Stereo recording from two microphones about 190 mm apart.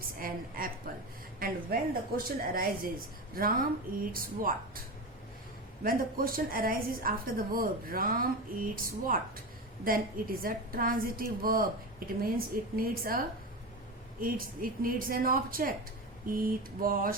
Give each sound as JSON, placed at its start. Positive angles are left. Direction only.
{"t": 0.2, "sound": "a woman's voice", "side_deg": -50}
{"t": 5.8, "sound": "a woman's voice", "side_deg": -50}